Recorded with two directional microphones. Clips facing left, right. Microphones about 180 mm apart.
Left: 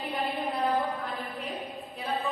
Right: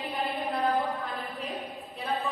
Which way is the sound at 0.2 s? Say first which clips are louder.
Right 1 dB; centre (ahead or behind).